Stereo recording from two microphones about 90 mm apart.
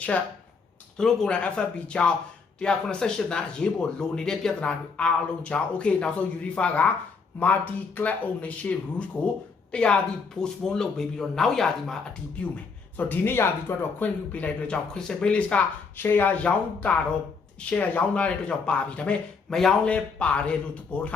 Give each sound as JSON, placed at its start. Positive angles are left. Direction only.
{"t": 0.9, "sound": "speech", "side_deg": 5}
{"t": 13.0, "sound": "speech", "side_deg": 20}
{"t": 14.3, "sound": "speech", "side_deg": 15}
{"t": 16.0, "sound": "speech", "side_deg": 25}